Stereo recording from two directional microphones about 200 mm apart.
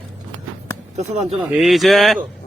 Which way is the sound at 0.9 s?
30° right (ahead or behind).